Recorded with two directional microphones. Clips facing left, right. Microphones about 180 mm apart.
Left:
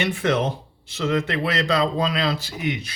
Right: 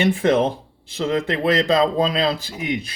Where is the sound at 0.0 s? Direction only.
35° right (ahead or behind).